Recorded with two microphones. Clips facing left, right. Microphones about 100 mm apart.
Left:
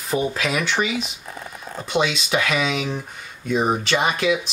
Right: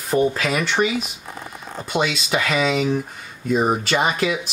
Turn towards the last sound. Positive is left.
turn(degrees=0)  # may be behind; listen again after turning